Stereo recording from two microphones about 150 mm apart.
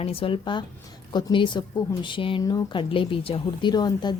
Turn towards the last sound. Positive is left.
turn(degrees=30)  # may be behind; listen again after turning